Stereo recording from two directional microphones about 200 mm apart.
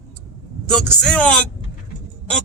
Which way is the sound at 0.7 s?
5° left (ahead or behind).